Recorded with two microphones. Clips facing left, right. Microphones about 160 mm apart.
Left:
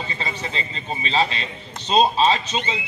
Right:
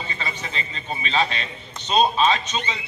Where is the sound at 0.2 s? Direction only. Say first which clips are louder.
Left 2 dB; 30° left (ahead or behind).